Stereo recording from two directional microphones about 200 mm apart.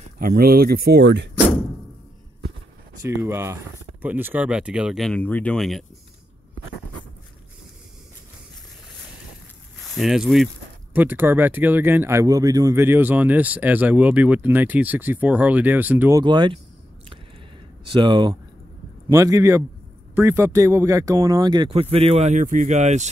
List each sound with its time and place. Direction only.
0.2 s speech: 50° right (ahead or behind)
3.0 s speech: 15° right (ahead or behind)
9.8 s speech: centre (ahead or behind)
16.2 s speech: 20° right (ahead or behind)
17.9 s speech: 20° right (ahead or behind)